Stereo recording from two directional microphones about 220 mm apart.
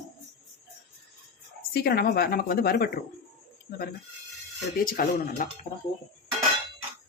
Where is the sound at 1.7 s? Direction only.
45° left (ahead or behind).